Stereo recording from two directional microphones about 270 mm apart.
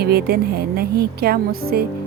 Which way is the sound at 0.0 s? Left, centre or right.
Right.